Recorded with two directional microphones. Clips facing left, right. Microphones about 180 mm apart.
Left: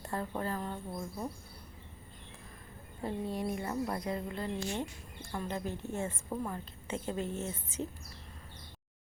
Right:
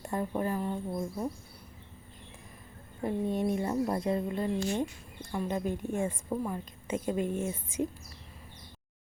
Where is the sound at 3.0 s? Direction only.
20° right (ahead or behind).